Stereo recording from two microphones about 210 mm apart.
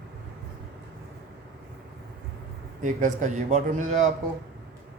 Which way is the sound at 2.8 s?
35° right (ahead or behind).